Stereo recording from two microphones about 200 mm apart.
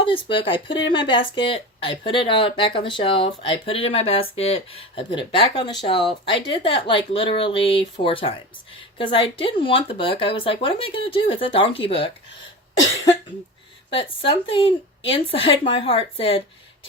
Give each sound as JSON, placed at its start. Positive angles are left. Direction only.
{"t": 0.0, "sound": "speech", "side_deg": 25}
{"t": 13.9, "sound": "speech", "side_deg": 25}